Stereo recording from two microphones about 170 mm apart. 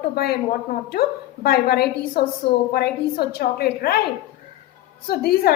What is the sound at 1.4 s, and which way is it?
A woman's voice, 65° left (ahead or behind).